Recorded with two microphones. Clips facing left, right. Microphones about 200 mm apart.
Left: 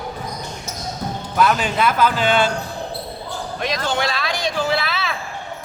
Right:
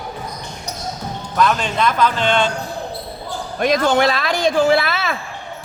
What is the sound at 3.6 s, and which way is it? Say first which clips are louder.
Speech: right 8 dB; 50° right (ahead or behind).